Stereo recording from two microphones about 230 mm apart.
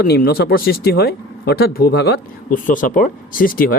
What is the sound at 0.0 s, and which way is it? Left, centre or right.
Speech, left.